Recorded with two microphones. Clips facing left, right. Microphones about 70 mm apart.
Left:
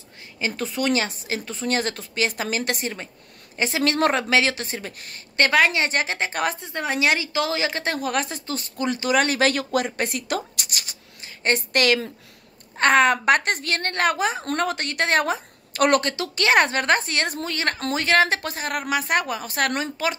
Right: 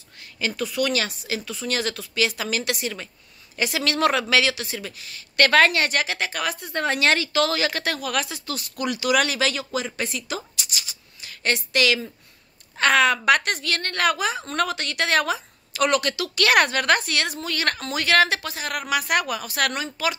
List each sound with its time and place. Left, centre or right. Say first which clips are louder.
0.6 s a woman's voice: left 1 dB; left
5.5 s a woman's voice: right 1 dB; centre; by 6.6 s left
6.6 s a woman's voice: right 1 dB; centre; by 11.0 s left
11.1 s a sound: left 2 dB; left
11.7 s a woman's voice: even; left
16.0 s a woman's voice: right 1 dB; left
18.4 s a woman's voice: left 2 dB; left